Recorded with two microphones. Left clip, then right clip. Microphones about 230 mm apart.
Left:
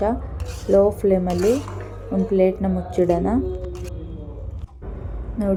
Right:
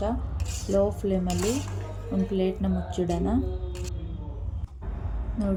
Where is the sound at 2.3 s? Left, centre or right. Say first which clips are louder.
Left 11 dB; centre.